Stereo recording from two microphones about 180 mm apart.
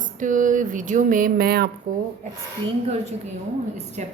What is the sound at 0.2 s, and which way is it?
Speech, 45° right (ahead or behind).